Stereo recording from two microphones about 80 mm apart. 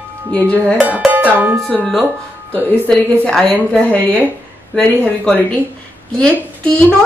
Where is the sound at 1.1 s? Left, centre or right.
Right.